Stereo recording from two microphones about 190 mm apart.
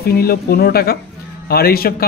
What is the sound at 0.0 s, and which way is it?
A man's voice, 55° left (ahead or behind).